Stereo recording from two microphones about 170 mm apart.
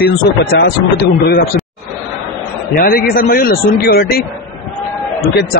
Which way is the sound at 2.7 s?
60° left (ahead or behind).